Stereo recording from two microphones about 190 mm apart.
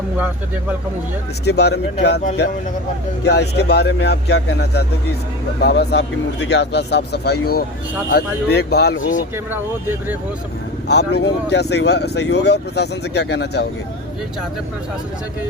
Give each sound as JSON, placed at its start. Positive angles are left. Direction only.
{"t": 1.5, "sound": "speech", "side_deg": 60}
{"t": 3.2, "sound": "speech", "side_deg": 60}
{"t": 9.3, "sound": "speech", "side_deg": -10}
{"t": 10.8, "sound": "speech", "side_deg": 60}